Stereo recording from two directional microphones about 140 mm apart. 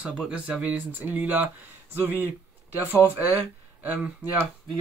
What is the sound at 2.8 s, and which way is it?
Speech, 10° right (ahead or behind).